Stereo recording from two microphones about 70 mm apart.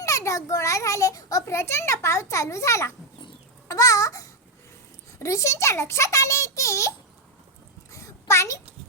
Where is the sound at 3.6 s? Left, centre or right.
Left.